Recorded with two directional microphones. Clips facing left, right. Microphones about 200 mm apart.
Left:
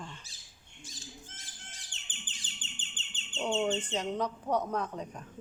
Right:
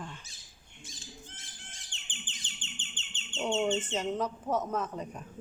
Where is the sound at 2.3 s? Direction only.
35° left (ahead or behind).